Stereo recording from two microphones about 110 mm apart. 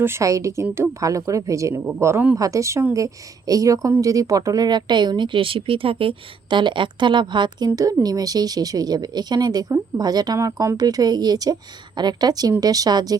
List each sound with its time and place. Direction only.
0.0 s speech: 25° right (ahead or behind)